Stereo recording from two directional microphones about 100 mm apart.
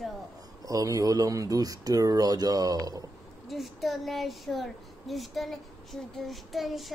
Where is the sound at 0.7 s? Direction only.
35° right (ahead or behind).